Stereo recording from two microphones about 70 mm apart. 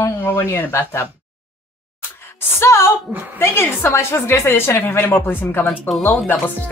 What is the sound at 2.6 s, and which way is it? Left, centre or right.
A woman's voice, left.